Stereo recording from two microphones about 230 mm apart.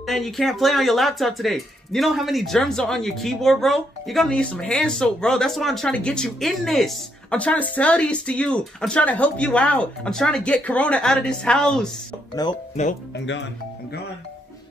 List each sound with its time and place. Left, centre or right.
0.0 s speech: centre
12.8 s speech: left